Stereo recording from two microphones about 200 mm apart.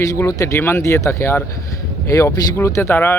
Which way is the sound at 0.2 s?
15° left (ahead or behind).